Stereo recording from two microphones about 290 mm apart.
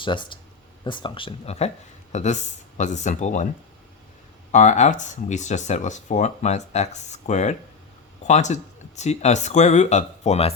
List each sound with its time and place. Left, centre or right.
0.0 s speech: centre
4.5 s speech: left